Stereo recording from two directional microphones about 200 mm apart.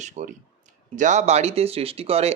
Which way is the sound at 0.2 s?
40° right (ahead or behind).